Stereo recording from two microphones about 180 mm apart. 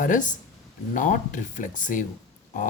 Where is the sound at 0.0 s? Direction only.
45° left (ahead or behind).